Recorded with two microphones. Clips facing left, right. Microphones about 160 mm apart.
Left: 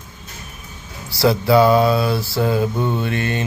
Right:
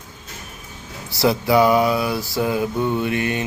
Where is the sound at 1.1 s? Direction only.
20° right (ahead or behind).